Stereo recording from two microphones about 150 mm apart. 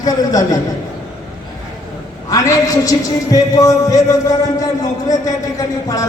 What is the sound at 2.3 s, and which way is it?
A man's voice, 25° left (ahead or behind).